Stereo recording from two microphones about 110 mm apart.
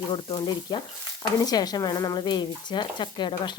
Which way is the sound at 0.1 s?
45° left (ahead or behind).